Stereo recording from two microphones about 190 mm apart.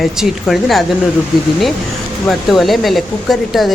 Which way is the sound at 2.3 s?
Centre (ahead or behind).